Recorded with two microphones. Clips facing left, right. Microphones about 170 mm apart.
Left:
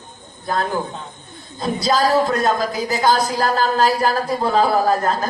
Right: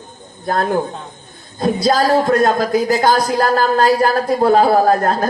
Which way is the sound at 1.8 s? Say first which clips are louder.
Right 2 dB; 50° right (ahead or behind).